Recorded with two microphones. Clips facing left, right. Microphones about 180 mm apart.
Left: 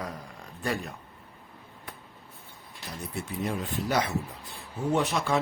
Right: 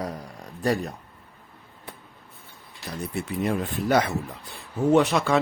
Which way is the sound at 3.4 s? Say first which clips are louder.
Right 5 dB; 55° right (ahead or behind).